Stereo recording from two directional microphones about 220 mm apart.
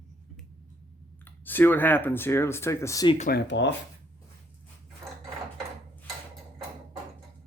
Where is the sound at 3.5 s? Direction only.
55° left (ahead or behind).